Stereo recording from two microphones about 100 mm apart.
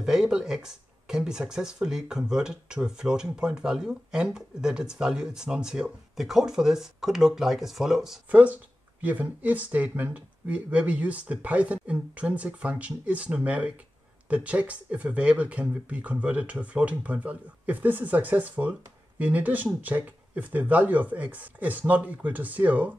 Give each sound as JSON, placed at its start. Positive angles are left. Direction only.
{"t": 0.0, "sound": "speech", "side_deg": -5}
{"t": 8.3, "sound": "speech", "side_deg": -15}